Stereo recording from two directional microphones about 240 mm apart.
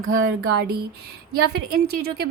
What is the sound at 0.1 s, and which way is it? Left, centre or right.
A woman's voice, right.